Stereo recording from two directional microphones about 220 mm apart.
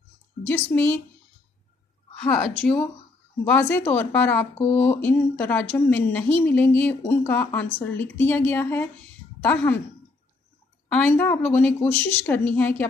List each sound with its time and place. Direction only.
0.5 s speech: 10° left (ahead or behind)
2.4 s speech: 5° left (ahead or behind)
10.9 s speech: 10° left (ahead or behind)